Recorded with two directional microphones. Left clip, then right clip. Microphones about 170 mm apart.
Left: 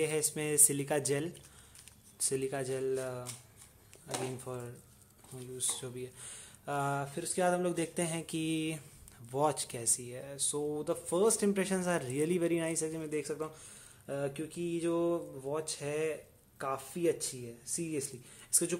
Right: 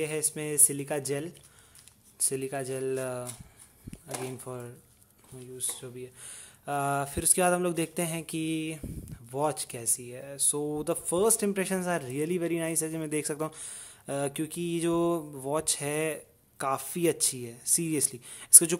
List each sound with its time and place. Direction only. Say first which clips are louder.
0.0 s speech: right 1 dB; 15° right (ahead or behind)
3.0 s speech: right 5 dB; 30° right (ahead or behind)
4.5 s mantra: right 2 dB; 20° right (ahead or behind)
5.4 s speech: even; 10° right (ahead or behind)
7.0 s mantra: right 6 dB; 40° right (ahead or behind); by 8.8 s 15° right (ahead or behind)
9.3 s speech: right 2 dB; 15° right (ahead or behind); by 18.8 s 40° right (ahead or behind)